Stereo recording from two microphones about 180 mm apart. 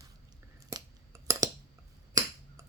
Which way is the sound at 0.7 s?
20° right (ahead or behind).